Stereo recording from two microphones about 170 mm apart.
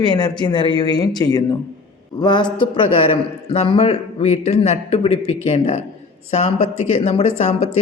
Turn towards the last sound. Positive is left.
turn(degrees=40)  # may be behind; listen again after turning